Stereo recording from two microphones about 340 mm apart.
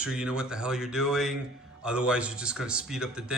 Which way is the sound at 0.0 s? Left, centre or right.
Centre.